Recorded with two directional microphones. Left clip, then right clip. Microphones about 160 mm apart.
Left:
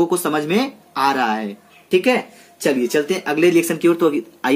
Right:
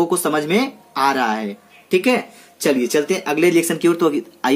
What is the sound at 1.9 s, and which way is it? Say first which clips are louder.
Speech: left 1 dB; 25° right (ahead or behind).